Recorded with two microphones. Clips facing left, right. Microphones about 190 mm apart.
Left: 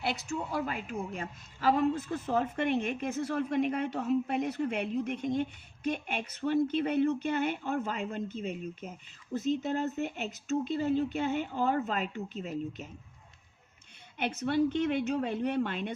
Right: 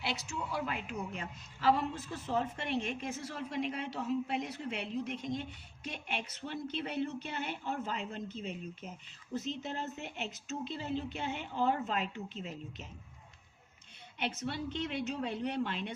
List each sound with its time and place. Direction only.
0.0 s a woman's voice: 50° left (ahead or behind)
14.2 s a woman's voice: 50° left (ahead or behind)